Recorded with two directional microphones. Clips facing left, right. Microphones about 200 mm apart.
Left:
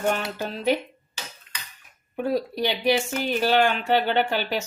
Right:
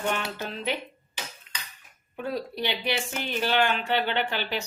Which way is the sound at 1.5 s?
20° right (ahead or behind).